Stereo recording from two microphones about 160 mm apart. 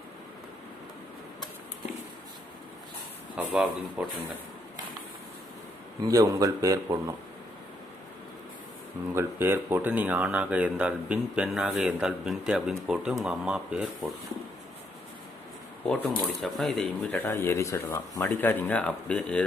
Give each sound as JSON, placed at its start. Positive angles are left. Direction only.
{"t": 3.3, "sound": "speech", "side_deg": -5}
{"t": 6.0, "sound": "speech", "side_deg": -20}
{"t": 9.1, "sound": "speech", "side_deg": -15}
{"t": 16.2, "sound": "speech", "side_deg": 0}